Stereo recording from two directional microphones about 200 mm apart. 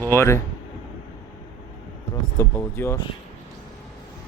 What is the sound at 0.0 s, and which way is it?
Speech, 10° left (ahead or behind).